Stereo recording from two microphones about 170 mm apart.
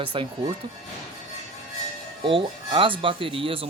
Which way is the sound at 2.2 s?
30° right (ahead or behind).